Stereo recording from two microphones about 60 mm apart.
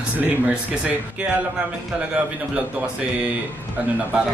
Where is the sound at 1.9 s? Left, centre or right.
Centre.